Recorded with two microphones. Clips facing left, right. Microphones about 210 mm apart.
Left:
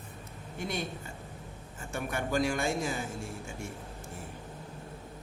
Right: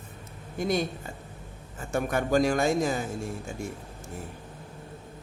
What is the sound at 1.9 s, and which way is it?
Speech, 40° right (ahead or behind).